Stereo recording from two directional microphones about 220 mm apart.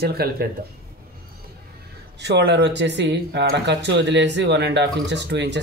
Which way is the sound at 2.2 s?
50° right (ahead or behind).